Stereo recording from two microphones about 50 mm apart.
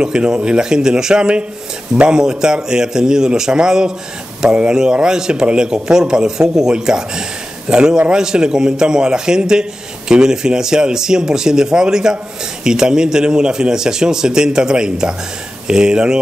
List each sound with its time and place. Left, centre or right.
0.0 s a man's voice: centre